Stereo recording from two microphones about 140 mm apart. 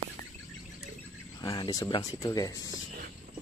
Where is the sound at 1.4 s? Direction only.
30° left (ahead or behind).